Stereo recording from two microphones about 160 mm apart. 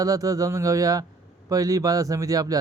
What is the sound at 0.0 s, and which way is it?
Speech, 20° right (ahead or behind).